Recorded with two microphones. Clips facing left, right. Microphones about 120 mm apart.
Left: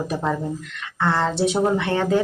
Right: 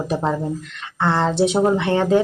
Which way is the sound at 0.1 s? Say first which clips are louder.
Right 3 dB; 25° right (ahead or behind).